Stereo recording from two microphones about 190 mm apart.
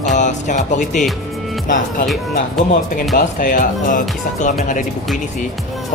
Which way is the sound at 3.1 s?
45° left (ahead or behind).